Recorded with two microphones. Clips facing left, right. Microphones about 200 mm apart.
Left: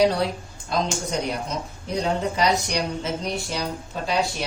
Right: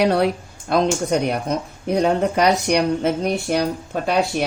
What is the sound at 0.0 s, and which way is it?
Speech, 65° right (ahead or behind).